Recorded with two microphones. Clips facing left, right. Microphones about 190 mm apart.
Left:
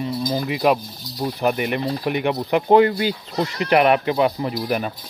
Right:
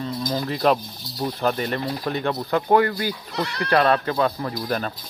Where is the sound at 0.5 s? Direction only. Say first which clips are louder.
Even; 10° left (ahead or behind).